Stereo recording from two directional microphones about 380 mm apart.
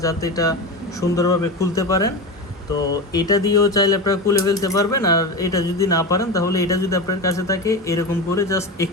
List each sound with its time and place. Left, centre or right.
0.0 s speech: centre
3.1 s speech: centre